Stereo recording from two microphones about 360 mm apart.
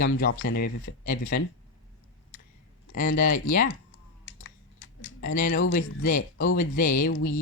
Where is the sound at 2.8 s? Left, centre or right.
Left.